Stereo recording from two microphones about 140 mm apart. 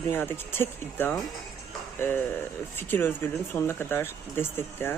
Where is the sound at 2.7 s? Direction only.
15° left (ahead or behind).